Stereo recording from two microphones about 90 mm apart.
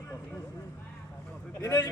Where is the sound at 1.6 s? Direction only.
40° left (ahead or behind).